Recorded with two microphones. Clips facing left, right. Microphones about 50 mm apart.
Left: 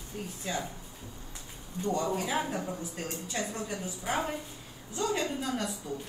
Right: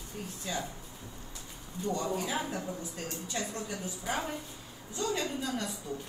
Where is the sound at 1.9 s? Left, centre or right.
Left.